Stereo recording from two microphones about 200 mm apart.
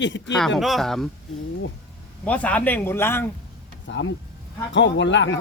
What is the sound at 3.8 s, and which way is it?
A man's voice, 65° left (ahead or behind).